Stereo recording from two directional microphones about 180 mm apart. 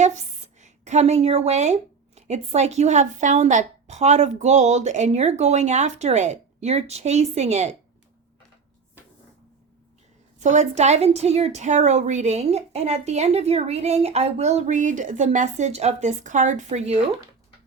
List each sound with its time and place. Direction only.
0.0 s a woman's voice: 40° right (ahead or behind)
10.4 s a woman's voice: 40° right (ahead or behind)